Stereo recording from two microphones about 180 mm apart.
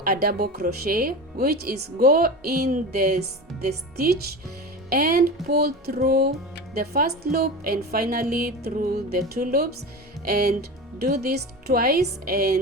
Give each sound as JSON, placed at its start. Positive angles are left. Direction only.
{"t": 0.0, "sound": "speech", "side_deg": -60}